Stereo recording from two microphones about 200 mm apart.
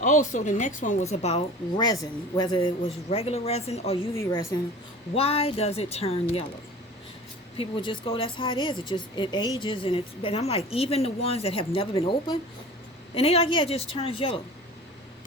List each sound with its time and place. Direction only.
0.0 s a woman's voice: 40° left (ahead or behind)
4.1 s a woman's voice: 15° left (ahead or behind)
5.1 s a woman's voice: 30° left (ahead or behind)
7.5 s a woman's voice: 25° left (ahead or behind)